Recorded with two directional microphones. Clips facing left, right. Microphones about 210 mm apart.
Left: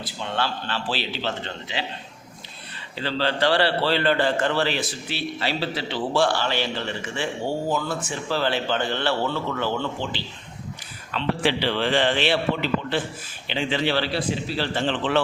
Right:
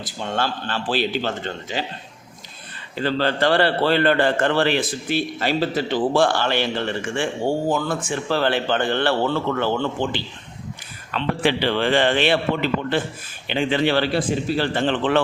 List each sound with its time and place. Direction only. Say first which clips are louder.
0.2 s a man's voice: right 3 dB; 45° right (ahead or behind)
2.9 s a man's voice: right 4 dB; 50° right (ahead or behind)
13.5 s a man's voice: right 4 dB; 55° right (ahead or behind)